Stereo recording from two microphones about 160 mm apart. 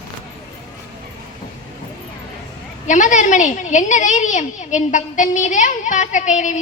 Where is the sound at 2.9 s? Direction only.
50° left (ahead or behind).